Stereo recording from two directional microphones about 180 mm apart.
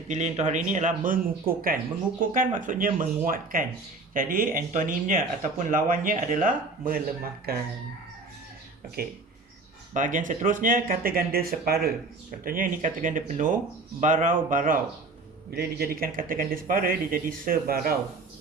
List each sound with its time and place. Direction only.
0.1 s speech: 40° right (ahead or behind)
7.5 s fowl: 60° right (ahead or behind)
9.9 s speech: 45° right (ahead or behind)